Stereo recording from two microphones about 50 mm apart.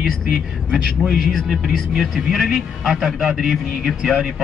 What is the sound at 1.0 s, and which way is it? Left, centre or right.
A man's voice, centre.